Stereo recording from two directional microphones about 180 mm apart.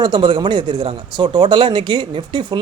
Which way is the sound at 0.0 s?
25° right (ahead or behind).